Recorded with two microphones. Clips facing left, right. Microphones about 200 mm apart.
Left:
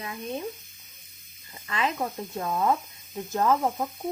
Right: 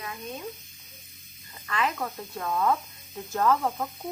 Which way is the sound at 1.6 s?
20° left (ahead or behind).